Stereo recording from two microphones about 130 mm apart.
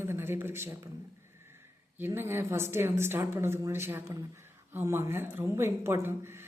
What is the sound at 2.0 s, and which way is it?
A woman's voice, 20° right (ahead or behind).